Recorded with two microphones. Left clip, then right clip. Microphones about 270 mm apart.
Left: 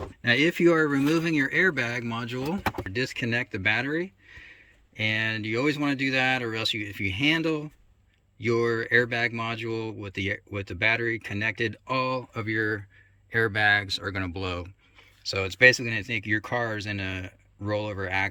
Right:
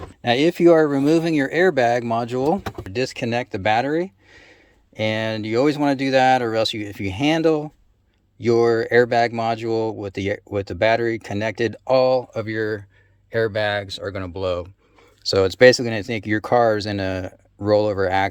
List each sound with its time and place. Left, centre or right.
0.2 s speech: centre
15.2 s speech: right